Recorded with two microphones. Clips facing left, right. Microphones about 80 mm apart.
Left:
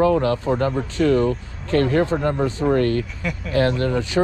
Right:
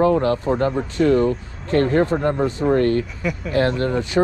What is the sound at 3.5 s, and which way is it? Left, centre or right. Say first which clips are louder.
Speech: even; right.